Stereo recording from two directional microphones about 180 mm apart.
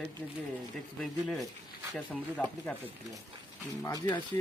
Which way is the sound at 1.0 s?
Centre (ahead or behind).